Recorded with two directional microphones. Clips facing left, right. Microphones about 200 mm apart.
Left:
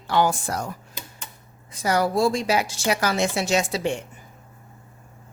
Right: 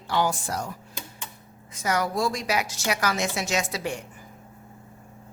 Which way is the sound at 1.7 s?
35° left (ahead or behind).